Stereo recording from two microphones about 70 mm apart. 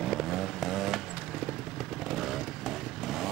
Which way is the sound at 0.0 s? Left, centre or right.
Centre.